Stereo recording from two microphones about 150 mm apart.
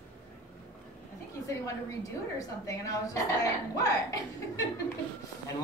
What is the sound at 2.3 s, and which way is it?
Speech, 20° left (ahead or behind).